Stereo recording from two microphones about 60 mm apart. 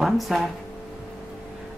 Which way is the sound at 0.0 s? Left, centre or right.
Centre.